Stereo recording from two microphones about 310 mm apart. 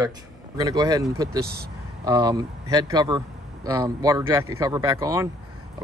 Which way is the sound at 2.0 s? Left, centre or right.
Centre.